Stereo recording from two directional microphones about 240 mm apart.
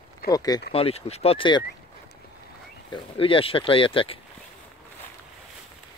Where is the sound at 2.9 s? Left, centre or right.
Left.